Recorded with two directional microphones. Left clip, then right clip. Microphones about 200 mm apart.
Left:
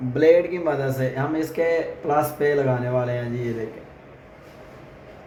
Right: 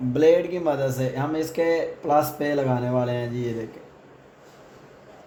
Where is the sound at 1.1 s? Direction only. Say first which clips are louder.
Left 1 dB; 40° right (ahead or behind).